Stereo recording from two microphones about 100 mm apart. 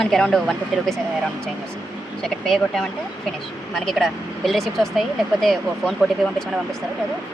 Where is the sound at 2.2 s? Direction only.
5° left (ahead or behind).